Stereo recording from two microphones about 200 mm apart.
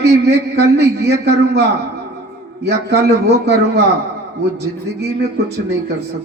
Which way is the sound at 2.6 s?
55° right (ahead or behind).